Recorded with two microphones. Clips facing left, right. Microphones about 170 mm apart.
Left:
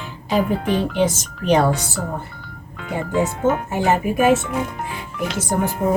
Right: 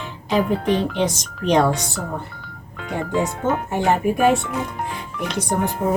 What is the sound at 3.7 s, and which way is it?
Speech, 5° left (ahead or behind).